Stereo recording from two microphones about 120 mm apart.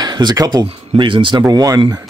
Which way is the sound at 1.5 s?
30° right (ahead or behind).